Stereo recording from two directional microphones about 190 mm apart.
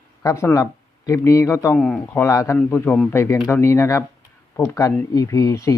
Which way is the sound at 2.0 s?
15° left (ahead or behind).